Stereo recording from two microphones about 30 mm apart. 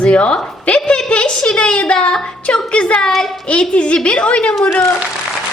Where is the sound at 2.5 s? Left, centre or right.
Left.